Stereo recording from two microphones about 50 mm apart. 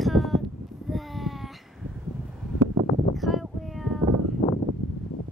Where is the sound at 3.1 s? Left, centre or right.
Centre.